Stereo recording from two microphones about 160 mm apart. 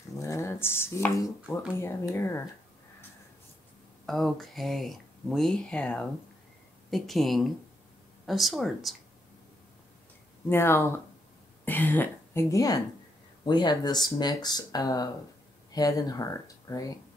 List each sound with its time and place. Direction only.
0.2 s a sound: 20° left (ahead or behind)
1.8 s speech: 15° left (ahead or behind)
4.0 s speech: centre (ahead or behind)
10.5 s a woman's voice: 15° left (ahead or behind)